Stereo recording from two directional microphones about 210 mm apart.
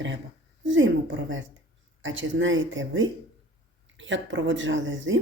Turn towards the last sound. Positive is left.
turn(degrees=-65)  # may be behind; listen again after turning